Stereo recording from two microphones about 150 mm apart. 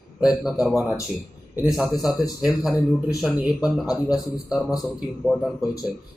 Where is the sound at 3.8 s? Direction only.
25° left (ahead or behind).